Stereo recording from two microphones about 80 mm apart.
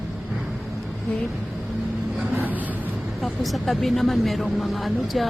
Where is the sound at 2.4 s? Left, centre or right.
Right.